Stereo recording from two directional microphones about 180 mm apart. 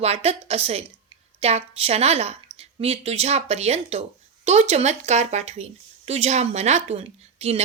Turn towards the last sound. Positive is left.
turn(degrees=-35)  # may be behind; listen again after turning